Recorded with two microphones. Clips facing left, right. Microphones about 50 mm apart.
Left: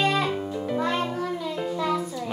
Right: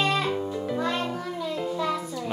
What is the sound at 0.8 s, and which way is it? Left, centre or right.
Music, centre.